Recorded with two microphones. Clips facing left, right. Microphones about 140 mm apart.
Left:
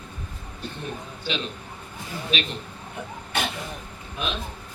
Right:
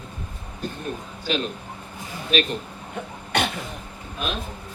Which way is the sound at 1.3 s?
45° right (ahead or behind).